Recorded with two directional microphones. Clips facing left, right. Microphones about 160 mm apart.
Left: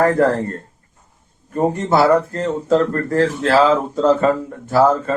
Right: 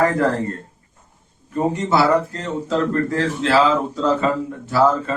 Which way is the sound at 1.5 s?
50° left (ahead or behind).